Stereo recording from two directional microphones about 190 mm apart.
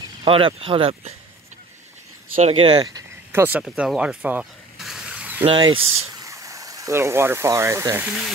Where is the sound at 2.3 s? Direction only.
30° right (ahead or behind).